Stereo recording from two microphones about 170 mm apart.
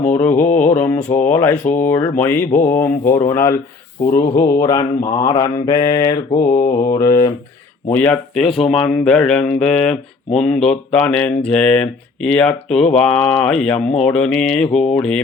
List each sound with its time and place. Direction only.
0.2 s speech: 15° left (ahead or behind)
2.5 s speech: 50° left (ahead or behind)
3.1 s speech: 15° left (ahead or behind)
4.0 s mantra: 20° left (ahead or behind)
7.9 s speech: 10° left (ahead or behind)